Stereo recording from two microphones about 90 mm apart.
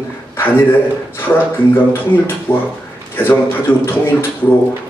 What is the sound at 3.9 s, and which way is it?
Speech, 25° left (ahead or behind).